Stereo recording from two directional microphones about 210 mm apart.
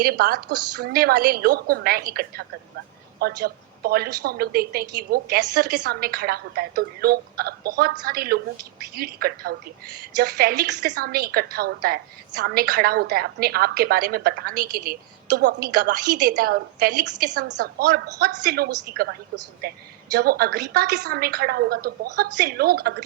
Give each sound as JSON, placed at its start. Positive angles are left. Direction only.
{"t": 0.0, "sound": "a woman's voice", "side_deg": -45}
{"t": 0.4, "sound": "a woman's voice", "side_deg": -90}
{"t": 0.9, "sound": "a woman's voice", "side_deg": -45}